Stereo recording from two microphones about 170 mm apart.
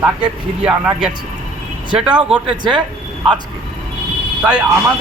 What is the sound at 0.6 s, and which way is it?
Speech, 5° right (ahead or behind).